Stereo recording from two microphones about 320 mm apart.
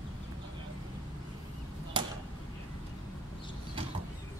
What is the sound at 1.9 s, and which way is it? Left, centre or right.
Arrow, centre.